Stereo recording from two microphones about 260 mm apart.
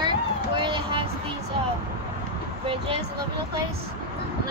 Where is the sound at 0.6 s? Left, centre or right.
Centre.